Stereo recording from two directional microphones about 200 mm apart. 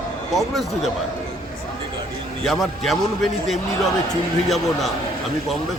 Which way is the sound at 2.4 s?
Centre (ahead or behind).